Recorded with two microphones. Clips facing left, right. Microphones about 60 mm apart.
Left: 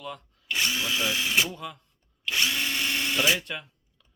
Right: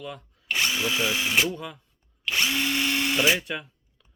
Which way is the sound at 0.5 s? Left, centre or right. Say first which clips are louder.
Right 2 dB; right.